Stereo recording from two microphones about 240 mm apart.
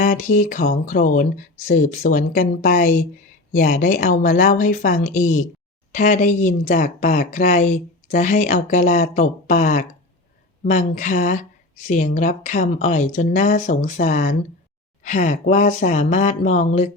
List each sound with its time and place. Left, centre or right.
0.0 s speech: left